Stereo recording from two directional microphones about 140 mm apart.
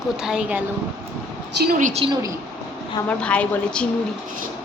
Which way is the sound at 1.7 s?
65° right (ahead or behind).